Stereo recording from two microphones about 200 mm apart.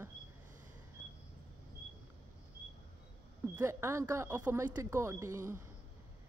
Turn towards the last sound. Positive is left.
turn(degrees=-15)  # may be behind; listen again after turning